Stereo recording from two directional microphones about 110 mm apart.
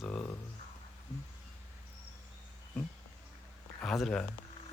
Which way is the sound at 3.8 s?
5° left (ahead or behind).